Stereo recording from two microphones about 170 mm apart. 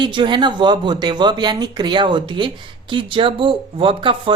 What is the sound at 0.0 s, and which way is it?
Speech, 30° right (ahead or behind).